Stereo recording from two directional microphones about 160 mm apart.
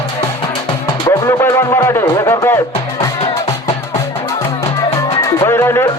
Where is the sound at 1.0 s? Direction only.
20° left (ahead or behind).